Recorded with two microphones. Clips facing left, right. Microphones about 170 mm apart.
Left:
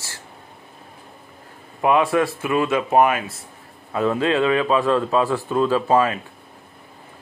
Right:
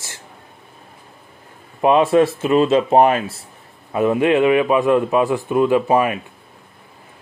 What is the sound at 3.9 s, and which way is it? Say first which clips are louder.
A man's voice: right 4 dB; 20° right (ahead or behind).